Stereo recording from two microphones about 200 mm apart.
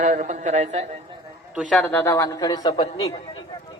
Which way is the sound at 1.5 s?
Centre (ahead or behind).